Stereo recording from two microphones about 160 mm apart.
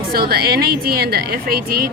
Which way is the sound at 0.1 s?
70° right (ahead or behind).